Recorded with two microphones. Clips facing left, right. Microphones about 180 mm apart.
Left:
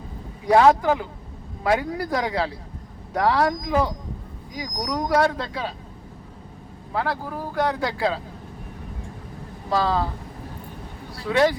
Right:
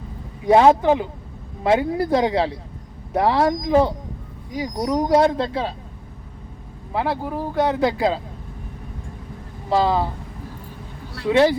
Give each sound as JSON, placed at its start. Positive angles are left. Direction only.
{"t": 0.4, "sound": "speech", "side_deg": -25}
{"t": 6.9, "sound": "speech", "side_deg": -20}
{"t": 9.6, "sound": "speech", "side_deg": -20}
{"t": 11.3, "sound": "speech", "side_deg": -25}